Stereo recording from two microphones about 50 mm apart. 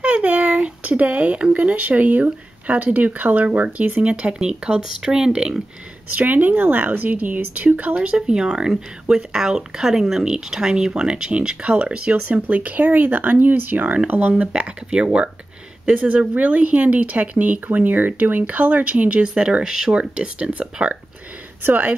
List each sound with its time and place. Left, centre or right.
0.0 s speech: right
4.1 s speech: right
6.1 s speech: right; by 12.4 s centre
12.4 s speech: right